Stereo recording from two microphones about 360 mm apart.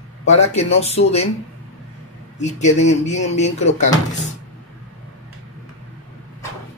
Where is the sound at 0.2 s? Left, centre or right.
Centre.